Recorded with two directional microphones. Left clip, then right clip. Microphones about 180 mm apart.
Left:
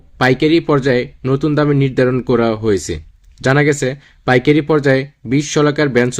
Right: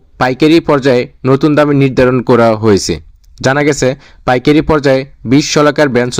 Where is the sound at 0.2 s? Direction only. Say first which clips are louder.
Right 4 dB; 40° right (ahead or behind).